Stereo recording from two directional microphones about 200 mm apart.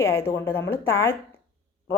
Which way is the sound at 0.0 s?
15° left (ahead or behind).